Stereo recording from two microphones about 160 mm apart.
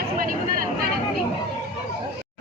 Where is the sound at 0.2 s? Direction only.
60° right (ahead or behind).